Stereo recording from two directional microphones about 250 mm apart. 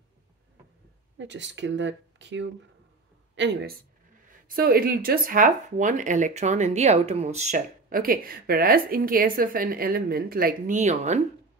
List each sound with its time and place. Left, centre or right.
1.1 s speech: right